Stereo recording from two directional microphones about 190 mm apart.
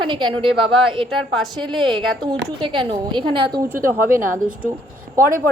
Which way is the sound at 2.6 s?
25° right (ahead or behind).